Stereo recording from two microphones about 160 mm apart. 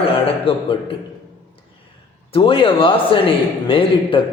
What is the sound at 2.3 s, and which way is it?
A man's voice, 35° left (ahead or behind).